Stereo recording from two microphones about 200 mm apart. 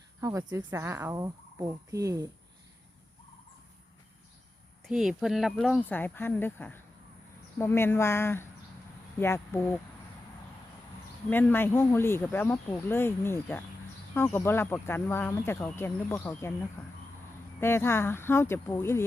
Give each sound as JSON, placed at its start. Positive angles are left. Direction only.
{"t": 0.2, "sound": "a woman's voice", "side_deg": -15}
{"t": 4.9, "sound": "speech", "side_deg": 0}
{"t": 11.3, "sound": "speech", "side_deg": 10}
{"t": 17.6, "sound": "speech", "side_deg": 10}